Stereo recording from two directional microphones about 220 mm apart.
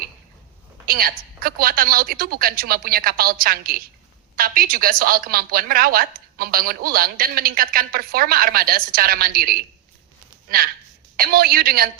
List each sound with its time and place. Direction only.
0.9 s a woman's voice: 40° right (ahead or behind)
10.6 s a woman's voice: 40° right (ahead or behind)